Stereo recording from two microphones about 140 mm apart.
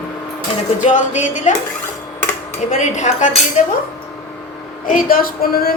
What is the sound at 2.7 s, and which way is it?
Speech, 60° left (ahead or behind).